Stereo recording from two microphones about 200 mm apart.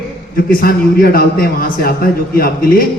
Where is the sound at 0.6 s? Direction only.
50° left (ahead or behind).